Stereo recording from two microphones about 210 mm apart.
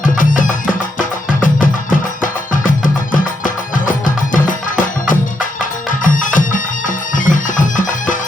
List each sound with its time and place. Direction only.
0.0 s music: 40° left (ahead or behind)